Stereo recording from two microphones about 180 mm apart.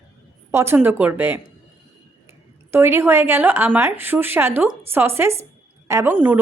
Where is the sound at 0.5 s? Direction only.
15° right (ahead or behind).